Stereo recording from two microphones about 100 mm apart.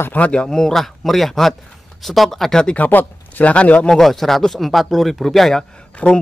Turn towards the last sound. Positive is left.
turn(degrees=10)  # may be behind; listen again after turning